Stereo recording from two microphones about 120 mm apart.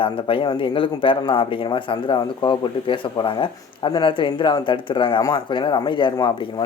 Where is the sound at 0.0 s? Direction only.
45° left (ahead or behind).